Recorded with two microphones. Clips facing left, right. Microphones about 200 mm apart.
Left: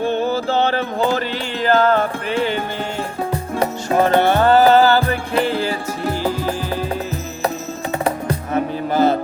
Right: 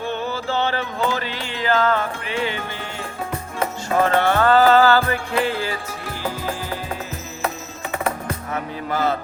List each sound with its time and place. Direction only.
0.6 s a sound: 45° left (ahead or behind)
1.6 s music: 50° left (ahead or behind)
4.0 s music: 20° left (ahead or behind)
8.0 s music: 30° left (ahead or behind)